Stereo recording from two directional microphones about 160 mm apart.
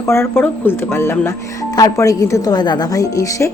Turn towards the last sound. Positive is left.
turn(degrees=20)  # may be behind; listen again after turning